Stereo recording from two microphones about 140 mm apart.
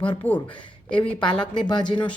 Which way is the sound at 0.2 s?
20° right (ahead or behind).